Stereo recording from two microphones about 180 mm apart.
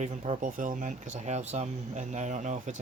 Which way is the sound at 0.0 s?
40° right (ahead or behind).